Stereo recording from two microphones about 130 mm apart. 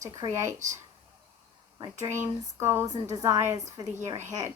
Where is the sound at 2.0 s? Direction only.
20° right (ahead or behind).